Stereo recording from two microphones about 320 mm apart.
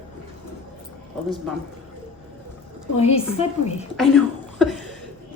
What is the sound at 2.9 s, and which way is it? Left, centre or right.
Speech, centre.